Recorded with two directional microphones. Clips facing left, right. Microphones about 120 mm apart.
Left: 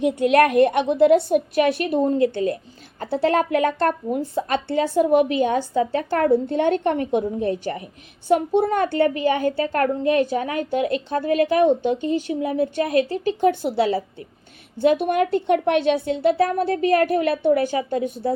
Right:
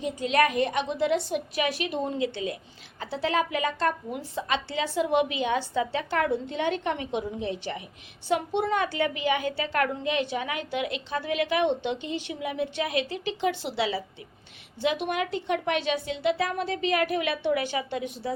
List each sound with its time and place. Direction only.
0.0 s a woman's voice: 65° left (ahead or behind); by 18.1 s 40° left (ahead or behind)